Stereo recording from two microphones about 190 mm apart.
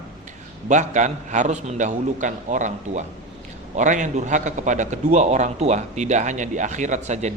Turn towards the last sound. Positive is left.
turn(degrees=-40)  # may be behind; listen again after turning